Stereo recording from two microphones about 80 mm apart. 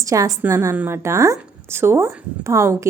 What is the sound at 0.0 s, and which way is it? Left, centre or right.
A woman's voice, right.